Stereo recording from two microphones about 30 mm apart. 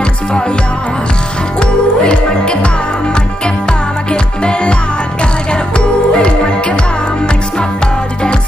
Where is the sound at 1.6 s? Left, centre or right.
Left.